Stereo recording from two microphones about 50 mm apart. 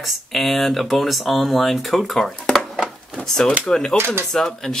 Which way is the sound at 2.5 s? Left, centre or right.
Centre.